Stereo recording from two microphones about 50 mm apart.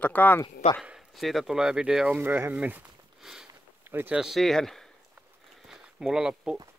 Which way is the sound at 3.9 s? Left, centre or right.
Right.